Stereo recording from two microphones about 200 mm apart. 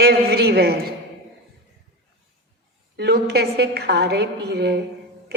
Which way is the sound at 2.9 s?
55° right (ahead or behind).